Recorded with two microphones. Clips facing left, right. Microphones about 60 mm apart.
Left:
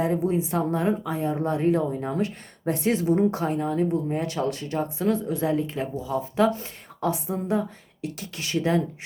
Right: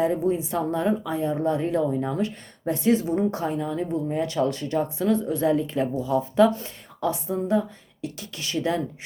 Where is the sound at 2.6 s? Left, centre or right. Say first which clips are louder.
Right 1 dB; left.